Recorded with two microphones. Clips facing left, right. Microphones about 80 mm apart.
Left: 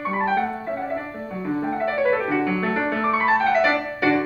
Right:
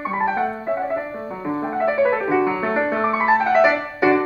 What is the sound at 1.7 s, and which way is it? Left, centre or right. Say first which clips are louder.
Piano: right 3 dB; centre.